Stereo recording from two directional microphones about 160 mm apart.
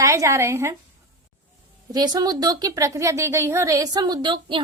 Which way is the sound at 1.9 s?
25° right (ahead or behind).